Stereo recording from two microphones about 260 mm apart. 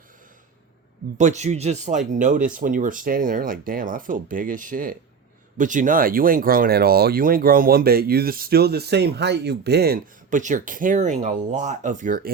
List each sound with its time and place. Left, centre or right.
1.2 s speech: right